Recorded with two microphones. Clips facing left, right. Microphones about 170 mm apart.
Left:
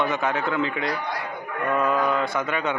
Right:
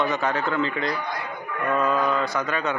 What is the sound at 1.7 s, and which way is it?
Mantra, 15° left (ahead or behind).